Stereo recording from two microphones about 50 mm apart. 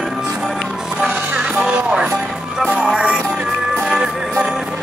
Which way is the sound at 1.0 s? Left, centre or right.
Centre.